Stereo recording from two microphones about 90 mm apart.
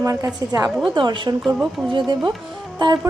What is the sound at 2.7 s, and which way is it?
Music, 50° right (ahead or behind).